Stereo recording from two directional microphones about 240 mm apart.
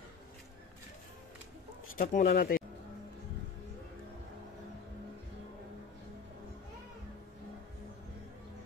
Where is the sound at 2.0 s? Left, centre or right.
Left.